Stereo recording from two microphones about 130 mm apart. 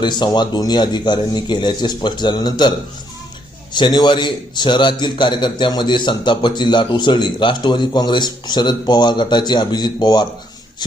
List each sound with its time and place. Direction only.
0.0 s a man's voice: 35° left (ahead or behind)